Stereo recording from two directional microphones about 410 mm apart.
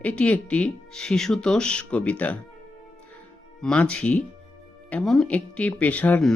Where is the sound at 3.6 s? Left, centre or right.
Centre.